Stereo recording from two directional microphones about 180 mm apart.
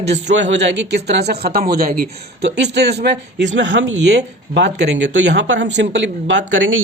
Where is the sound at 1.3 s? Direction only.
55° right (ahead or behind).